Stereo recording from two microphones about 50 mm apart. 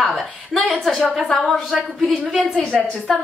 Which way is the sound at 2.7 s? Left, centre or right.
Centre.